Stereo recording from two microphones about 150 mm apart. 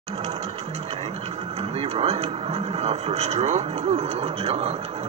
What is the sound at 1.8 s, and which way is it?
Speech, 40° right (ahead or behind).